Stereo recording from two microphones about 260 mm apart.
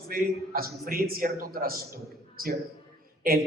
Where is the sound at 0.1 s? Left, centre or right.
Right.